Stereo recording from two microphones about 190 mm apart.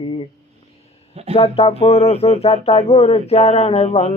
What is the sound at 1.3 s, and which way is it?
Speech, 30° left (ahead or behind).